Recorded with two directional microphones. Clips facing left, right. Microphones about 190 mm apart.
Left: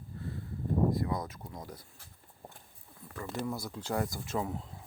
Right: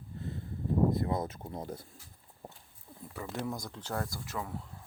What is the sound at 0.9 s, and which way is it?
Speech, 25° right (ahead or behind).